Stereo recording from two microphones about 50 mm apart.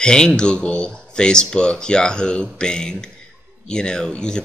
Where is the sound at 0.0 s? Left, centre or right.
Centre.